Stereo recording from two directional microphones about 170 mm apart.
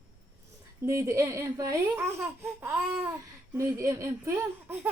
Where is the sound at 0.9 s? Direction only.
15° right (ahead or behind).